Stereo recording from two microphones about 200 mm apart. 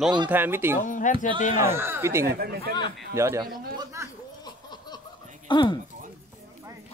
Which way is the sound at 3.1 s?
15° right (ahead or behind).